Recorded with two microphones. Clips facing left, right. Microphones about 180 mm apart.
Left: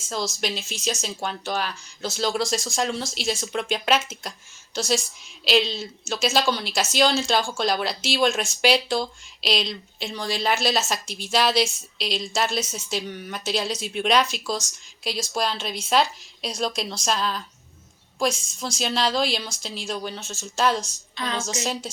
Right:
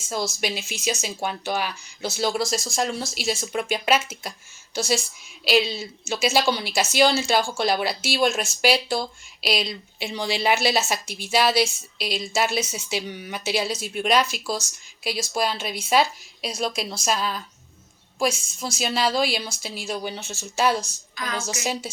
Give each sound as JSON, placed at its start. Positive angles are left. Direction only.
{"t": 0.1, "sound": "speech", "side_deg": -10}
{"t": 21.2, "sound": "a woman's voice", "side_deg": 25}
{"t": 21.6, "sound": "speech", "side_deg": -10}